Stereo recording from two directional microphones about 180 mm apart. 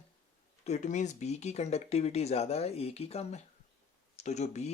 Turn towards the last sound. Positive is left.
turn(degrees=40)  # may be behind; listen again after turning